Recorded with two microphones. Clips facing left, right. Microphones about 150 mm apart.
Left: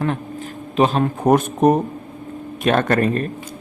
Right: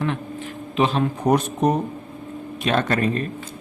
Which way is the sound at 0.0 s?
40° left (ahead or behind).